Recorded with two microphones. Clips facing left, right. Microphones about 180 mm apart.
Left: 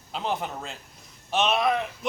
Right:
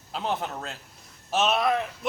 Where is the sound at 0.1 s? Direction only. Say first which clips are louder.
Even; centre (ahead or behind).